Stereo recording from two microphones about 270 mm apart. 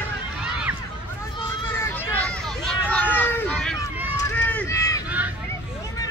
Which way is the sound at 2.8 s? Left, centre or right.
Centre.